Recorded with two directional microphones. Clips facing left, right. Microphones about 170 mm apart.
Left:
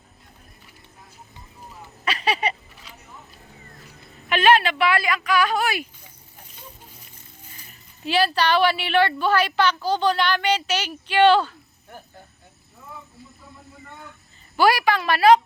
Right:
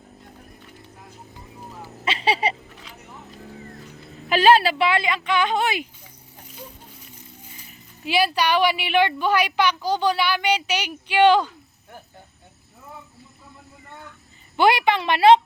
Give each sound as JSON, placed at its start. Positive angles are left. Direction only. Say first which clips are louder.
{"t": 2.0, "sound": "a sound", "louder": "right 1 dB", "side_deg": -30}
{"t": 4.3, "sound": "speech", "louder": "right 2 dB", "side_deg": -30}
{"t": 7.7, "sound": "speech", "louder": "even", "side_deg": -10}
{"t": 14.5, "sound": "speech", "louder": "right 1 dB", "side_deg": -20}